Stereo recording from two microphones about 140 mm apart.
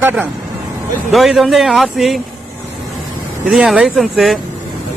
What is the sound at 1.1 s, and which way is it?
Speech, centre (ahead or behind).